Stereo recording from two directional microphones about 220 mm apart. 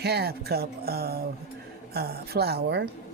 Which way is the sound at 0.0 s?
45° right (ahead or behind).